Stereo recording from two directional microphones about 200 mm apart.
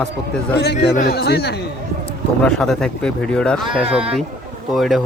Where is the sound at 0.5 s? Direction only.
55° left (ahead or behind).